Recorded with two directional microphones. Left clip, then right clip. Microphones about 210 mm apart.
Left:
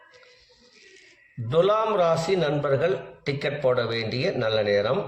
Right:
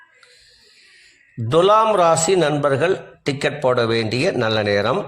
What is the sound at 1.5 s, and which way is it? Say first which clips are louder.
A man's voice: right 7 dB; 50° right (ahead or behind).